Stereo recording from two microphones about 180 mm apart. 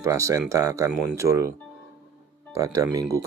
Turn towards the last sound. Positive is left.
turn(degrees=-20)  # may be behind; listen again after turning